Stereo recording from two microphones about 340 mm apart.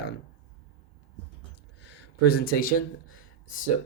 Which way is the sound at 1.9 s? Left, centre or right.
Left.